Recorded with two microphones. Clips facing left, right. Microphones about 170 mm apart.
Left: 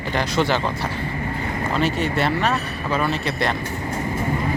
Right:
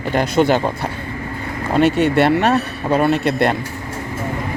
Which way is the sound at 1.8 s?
65° right (ahead or behind).